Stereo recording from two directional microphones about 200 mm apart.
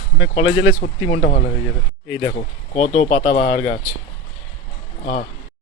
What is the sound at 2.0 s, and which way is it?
Speech, 30° left (ahead or behind).